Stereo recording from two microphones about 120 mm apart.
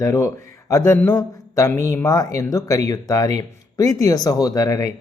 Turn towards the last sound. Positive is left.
turn(degrees=25)  # may be behind; listen again after turning